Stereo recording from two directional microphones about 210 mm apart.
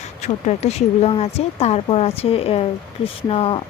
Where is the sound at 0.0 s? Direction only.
35° left (ahead or behind).